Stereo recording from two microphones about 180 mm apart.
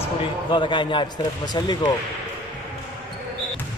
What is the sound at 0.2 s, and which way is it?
Speech, 25° left (ahead or behind).